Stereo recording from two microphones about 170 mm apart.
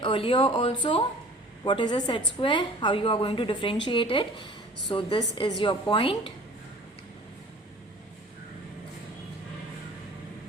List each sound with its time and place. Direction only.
0.0 s a woman's voice: 30° left (ahead or behind)